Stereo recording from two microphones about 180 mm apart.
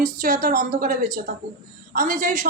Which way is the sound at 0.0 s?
55° right (ahead or behind).